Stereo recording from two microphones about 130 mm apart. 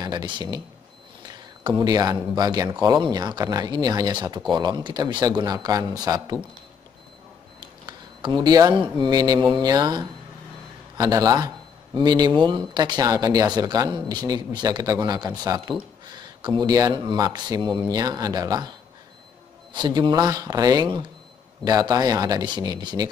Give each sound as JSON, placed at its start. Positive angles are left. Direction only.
{"t": 0.0, "sound": "speech", "side_deg": -30}
{"t": 1.2, "sound": "a sound", "side_deg": -30}
{"t": 2.3, "sound": "a man's voice", "side_deg": -30}
{"t": 7.8, "sound": "a sound", "side_deg": -35}
{"t": 9.0, "sound": "a man's voice", "side_deg": -30}
{"t": 19.7, "sound": "a man's voice", "side_deg": -35}